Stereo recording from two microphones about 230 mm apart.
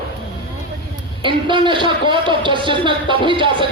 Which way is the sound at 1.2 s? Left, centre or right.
Right.